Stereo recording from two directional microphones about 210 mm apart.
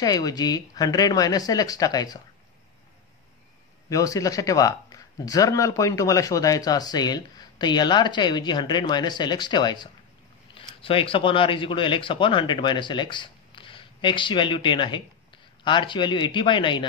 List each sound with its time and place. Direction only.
0.0 s speech: 20° left (ahead or behind)
3.9 s speech: 15° left (ahead or behind)